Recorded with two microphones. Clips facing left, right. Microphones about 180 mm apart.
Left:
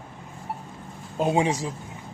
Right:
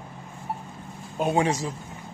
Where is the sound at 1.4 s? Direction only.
15° left (ahead or behind).